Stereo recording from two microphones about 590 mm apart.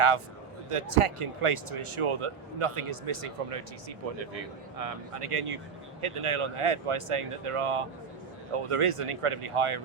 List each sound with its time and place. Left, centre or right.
0.7 s speech: right